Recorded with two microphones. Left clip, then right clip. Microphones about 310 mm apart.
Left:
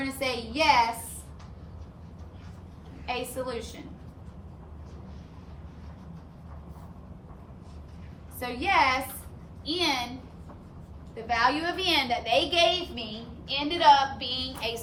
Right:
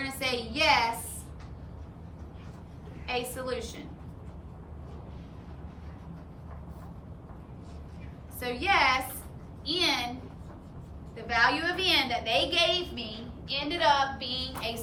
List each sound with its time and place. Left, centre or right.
0.0 s a woman's voice: centre
3.1 s a woman's voice: centre
8.4 s a woman's voice: centre
11.1 s a woman's voice: centre